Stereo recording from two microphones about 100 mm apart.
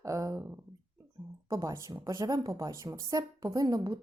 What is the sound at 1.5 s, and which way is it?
A woman's voice, 30° right (ahead or behind).